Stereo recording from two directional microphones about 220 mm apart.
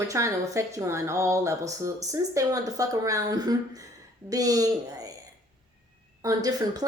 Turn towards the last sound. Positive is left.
turn(degrees=-15)  # may be behind; listen again after turning